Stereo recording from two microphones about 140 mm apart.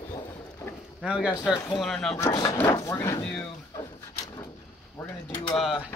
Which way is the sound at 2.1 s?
25° left (ahead or behind).